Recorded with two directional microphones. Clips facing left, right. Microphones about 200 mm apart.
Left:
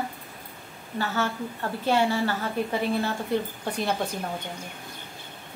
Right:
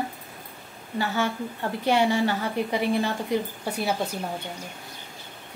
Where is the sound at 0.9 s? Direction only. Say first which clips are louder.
Right 2 dB; 15° right (ahead or behind).